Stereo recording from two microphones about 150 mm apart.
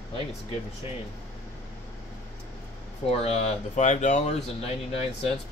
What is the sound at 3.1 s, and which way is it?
Speech, 45° left (ahead or behind).